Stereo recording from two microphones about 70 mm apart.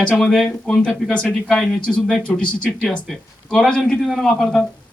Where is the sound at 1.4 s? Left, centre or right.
Centre.